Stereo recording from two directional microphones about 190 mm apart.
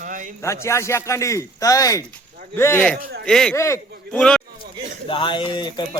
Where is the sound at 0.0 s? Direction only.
40° right (ahead or behind).